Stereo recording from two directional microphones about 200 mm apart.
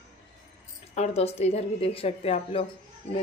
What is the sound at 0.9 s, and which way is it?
A woman's voice, 30° left (ahead or behind).